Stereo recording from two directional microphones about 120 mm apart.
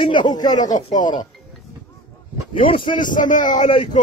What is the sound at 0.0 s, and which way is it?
Speech, 40° left (ahead or behind).